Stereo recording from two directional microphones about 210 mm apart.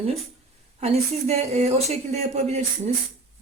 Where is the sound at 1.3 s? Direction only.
30° right (ahead or behind).